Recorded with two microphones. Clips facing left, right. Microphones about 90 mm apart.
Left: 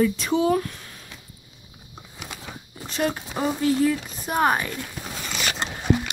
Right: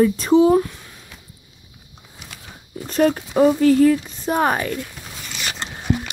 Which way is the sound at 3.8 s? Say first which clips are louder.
Right 7 dB; 40° right (ahead or behind).